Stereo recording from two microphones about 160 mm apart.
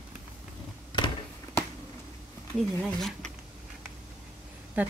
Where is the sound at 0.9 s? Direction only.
30° left (ahead or behind).